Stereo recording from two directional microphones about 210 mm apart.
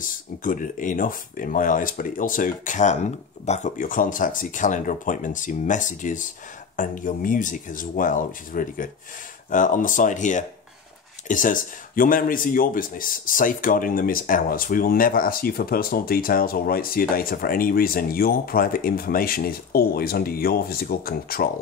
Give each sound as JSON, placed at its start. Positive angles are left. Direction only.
{"t": 0.0, "sound": "speech", "side_deg": 40}